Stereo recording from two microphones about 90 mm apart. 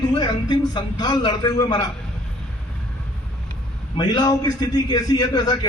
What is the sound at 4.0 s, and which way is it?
A man's voice, 50° left (ahead or behind).